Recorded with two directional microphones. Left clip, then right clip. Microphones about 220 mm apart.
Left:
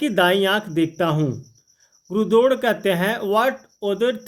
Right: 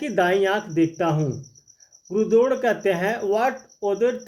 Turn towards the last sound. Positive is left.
turn(degrees=40)  # may be behind; listen again after turning